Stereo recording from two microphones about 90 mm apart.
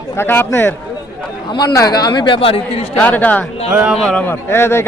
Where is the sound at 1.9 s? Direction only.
50° left (ahead or behind); by 2.8 s 90° left.